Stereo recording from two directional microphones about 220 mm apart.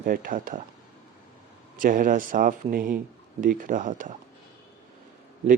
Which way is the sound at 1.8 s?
40° right (ahead or behind).